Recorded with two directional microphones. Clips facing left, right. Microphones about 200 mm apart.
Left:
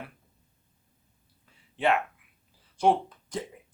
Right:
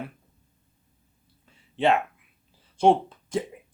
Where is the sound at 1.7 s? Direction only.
25° right (ahead or behind).